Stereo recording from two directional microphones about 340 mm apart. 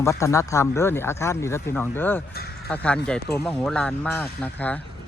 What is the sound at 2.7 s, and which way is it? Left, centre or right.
Speech, centre.